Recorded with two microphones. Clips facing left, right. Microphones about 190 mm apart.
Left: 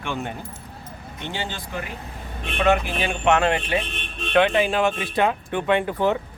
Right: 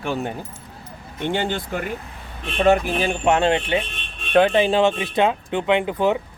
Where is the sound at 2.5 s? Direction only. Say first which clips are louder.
Right 3 dB; 40° right (ahead or behind); by 6.1 s 15° right (ahead or behind).